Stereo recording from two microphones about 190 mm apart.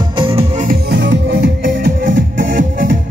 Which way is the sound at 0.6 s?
55° right (ahead or behind).